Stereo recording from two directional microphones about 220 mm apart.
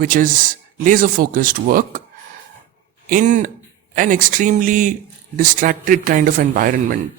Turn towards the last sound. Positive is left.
turn(degrees=-40)  # may be behind; listen again after turning